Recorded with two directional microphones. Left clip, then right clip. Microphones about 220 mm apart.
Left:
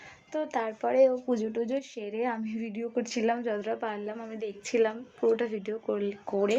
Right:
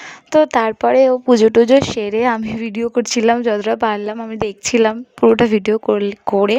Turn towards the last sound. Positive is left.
turn(degrees=-50)  # may be behind; listen again after turning